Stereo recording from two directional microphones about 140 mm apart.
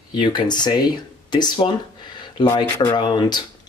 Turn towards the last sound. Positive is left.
turn(degrees=35)  # may be behind; listen again after turning